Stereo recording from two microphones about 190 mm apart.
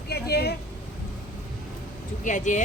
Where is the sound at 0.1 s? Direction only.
55° left (ahead or behind).